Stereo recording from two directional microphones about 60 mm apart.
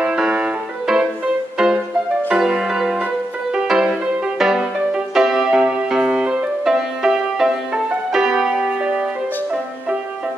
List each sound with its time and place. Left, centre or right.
0.0 s music: centre